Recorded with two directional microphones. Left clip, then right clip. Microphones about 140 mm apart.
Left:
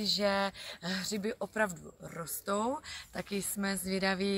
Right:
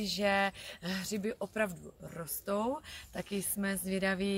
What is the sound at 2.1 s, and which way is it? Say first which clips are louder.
Speech: left 1 dB; 10° right (ahead or behind).